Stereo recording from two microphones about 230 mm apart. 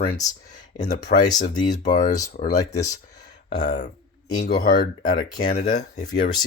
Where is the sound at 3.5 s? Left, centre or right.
Left.